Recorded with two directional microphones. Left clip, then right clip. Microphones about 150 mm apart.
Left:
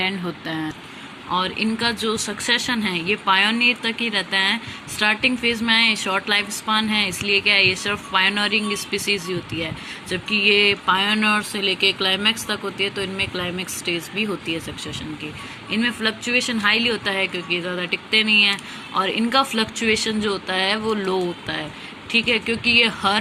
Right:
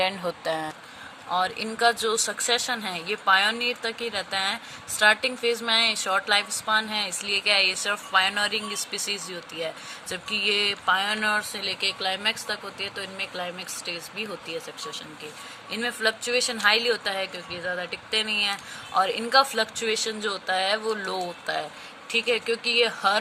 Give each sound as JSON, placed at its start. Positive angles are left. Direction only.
{"t": 0.0, "sound": "speech", "side_deg": -50}
{"t": 15.7, "sound": "speech", "side_deg": -45}
{"t": 22.1, "sound": "speech", "side_deg": -45}